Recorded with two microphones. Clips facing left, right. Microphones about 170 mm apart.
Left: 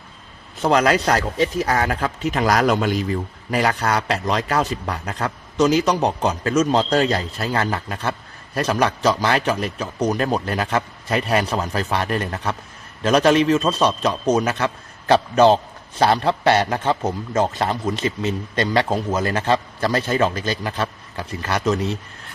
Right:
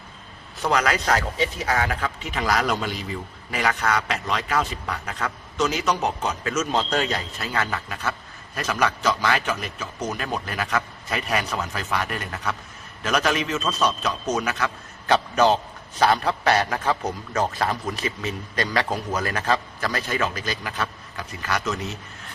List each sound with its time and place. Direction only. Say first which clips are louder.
0.6 s a man's voice: left 6 dB; 30° left (ahead or behind)